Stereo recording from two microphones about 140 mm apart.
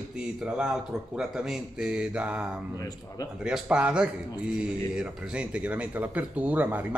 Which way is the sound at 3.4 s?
5° right (ahead or behind).